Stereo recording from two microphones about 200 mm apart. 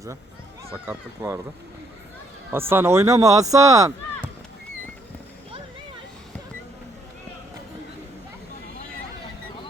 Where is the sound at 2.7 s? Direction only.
15° right (ahead or behind).